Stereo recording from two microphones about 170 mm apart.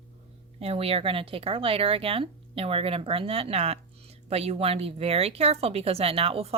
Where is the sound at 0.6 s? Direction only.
35° right (ahead or behind).